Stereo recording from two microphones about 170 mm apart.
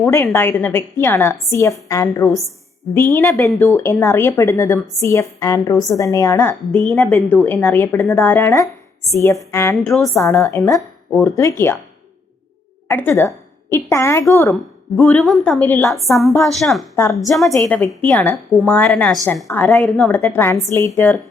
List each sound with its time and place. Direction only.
0.0 s a woman's voice: 15° left (ahead or behind)
2.2 s a woman's voice: centre (ahead or behind)
3.2 s a woman's voice: 15° left (ahead or behind)
12.9 s a woman's voice: 10° left (ahead or behind)
15.0 s a woman's voice: centre (ahead or behind); by 16.2 s 15° left (ahead or behind)
16.5 s a woman's voice: centre (ahead or behind)
16.9 s a woman's voice: 15° left (ahead or behind)
17.2 s a woman's voice: centre (ahead or behind); by 21.1 s 15° left (ahead or behind)